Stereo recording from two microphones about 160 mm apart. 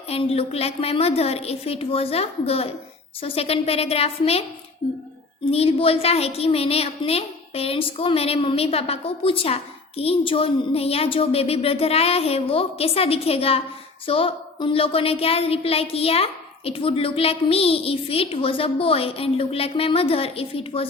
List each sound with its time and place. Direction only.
0.1 s a woman's voice: 35° left (ahead or behind)
5.5 s a woman's voice: 40° left (ahead or behind)